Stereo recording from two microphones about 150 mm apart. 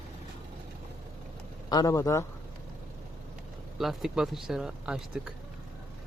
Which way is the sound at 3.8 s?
Centre (ahead or behind).